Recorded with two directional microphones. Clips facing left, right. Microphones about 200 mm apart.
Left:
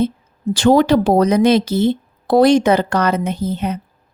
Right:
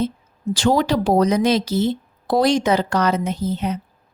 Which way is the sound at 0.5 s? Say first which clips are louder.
Left 6 dB; 60° left (ahead or behind).